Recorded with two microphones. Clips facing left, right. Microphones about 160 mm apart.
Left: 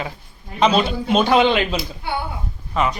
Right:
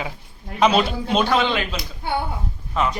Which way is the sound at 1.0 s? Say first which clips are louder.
Left 4 dB; 15° left (ahead or behind).